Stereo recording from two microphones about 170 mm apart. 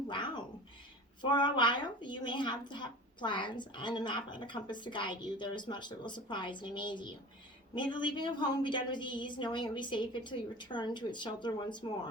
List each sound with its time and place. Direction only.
0.1 s cat: 30° left (ahead or behind)
1.2 s a woman's voice: 25° left (ahead or behind)